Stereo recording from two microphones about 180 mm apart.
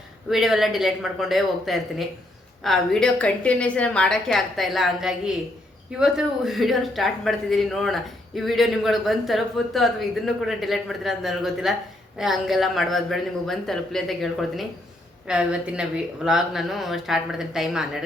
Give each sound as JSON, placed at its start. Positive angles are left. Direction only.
{"t": 0.3, "sound": "speech", "side_deg": 0}